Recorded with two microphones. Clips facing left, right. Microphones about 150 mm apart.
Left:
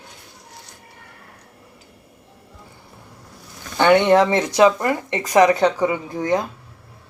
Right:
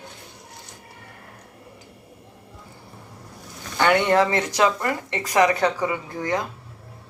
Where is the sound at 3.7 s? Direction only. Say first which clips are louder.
Left 5 dB; 25° left (ahead or behind).